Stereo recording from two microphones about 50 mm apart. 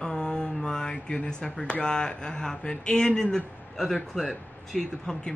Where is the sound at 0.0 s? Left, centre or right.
Centre.